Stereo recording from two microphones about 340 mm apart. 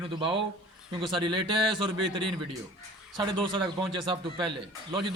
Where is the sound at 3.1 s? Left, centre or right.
Centre.